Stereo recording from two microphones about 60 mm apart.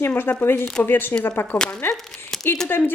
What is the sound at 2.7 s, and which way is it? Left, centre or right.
Speech, left.